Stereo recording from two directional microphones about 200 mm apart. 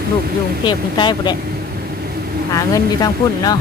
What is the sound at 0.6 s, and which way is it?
Speech, 25° left (ahead or behind).